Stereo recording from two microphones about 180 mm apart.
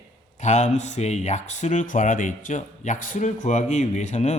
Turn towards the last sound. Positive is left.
turn(degrees=40)  # may be behind; listen again after turning